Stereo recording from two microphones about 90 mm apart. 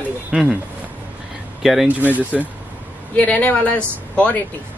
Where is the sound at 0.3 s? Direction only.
10° right (ahead or behind).